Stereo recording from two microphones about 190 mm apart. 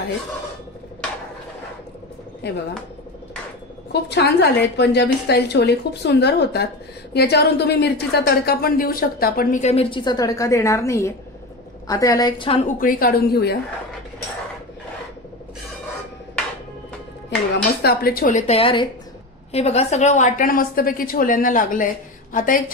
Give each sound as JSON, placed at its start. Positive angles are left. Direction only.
{"t": 2.4, "sound": "a woman's voice", "side_deg": 60}
{"t": 3.9, "sound": "a woman's voice", "side_deg": 60}
{"t": 12.6, "sound": "a woman's voice", "side_deg": 50}
{"t": 17.8, "sound": "a woman's voice", "side_deg": 55}